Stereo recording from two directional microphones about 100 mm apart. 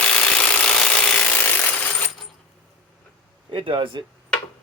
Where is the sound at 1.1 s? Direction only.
20° left (ahead or behind).